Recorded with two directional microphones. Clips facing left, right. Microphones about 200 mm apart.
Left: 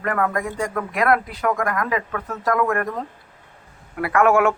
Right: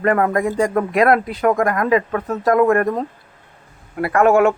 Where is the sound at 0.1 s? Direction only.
30° right (ahead or behind).